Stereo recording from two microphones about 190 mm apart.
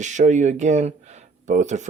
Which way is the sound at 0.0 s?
40° right (ahead or behind).